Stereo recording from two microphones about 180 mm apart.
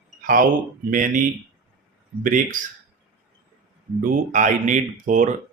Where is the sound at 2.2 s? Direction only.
50° right (ahead or behind).